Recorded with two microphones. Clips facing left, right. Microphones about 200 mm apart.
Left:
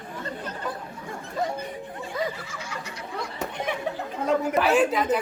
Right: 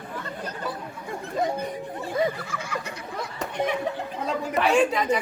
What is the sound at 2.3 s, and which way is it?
Snicker, 55° right (ahead or behind).